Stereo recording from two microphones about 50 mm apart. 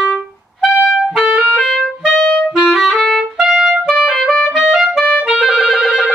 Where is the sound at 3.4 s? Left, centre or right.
Centre.